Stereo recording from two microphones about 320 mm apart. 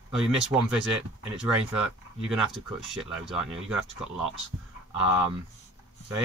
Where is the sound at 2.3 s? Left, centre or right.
Centre.